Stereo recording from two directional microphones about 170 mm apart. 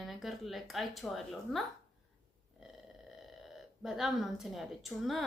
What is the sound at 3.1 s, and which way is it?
Speech, centre (ahead or behind).